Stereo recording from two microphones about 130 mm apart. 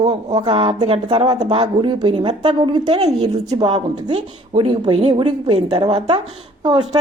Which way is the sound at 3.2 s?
30° right (ahead or behind).